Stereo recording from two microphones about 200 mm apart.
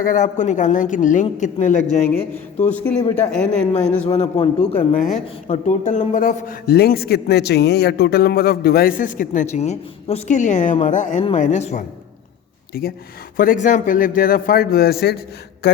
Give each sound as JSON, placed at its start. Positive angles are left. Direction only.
{"t": 0.0, "sound": "a man's voice", "side_deg": 45}
{"t": 3.8, "sound": "a man's voice", "side_deg": 5}
{"t": 4.1, "sound": "a man's voice", "side_deg": 30}
{"t": 12.7, "sound": "a man's voice", "side_deg": 50}
{"t": 15.6, "sound": "a sound", "side_deg": 55}